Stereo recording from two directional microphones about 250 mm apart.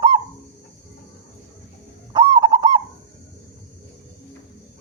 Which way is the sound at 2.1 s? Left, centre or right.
Centre.